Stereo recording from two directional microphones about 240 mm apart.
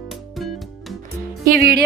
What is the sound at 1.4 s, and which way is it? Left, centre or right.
Speech, right.